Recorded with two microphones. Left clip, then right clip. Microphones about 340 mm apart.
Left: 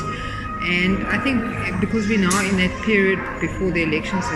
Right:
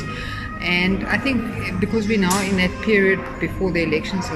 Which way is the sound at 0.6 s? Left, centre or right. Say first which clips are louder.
Even; right.